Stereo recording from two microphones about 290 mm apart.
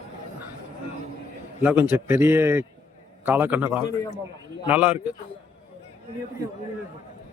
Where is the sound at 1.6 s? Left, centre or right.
Centre.